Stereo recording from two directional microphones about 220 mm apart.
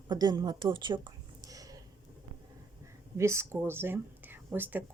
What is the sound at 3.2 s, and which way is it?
Speech, 10° right (ahead or behind).